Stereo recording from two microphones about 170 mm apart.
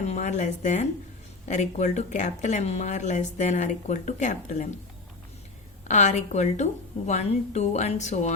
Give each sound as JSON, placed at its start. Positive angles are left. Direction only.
{"t": 0.0, "sound": "speech", "side_deg": 40}
{"t": 5.9, "sound": "speech", "side_deg": 45}